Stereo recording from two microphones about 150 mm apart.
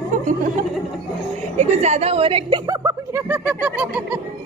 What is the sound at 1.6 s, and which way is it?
Speech, 50° right (ahead or behind).